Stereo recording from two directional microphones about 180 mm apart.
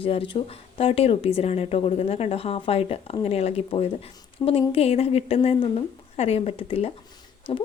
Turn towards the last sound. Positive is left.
turn(degrees=30)  # may be behind; listen again after turning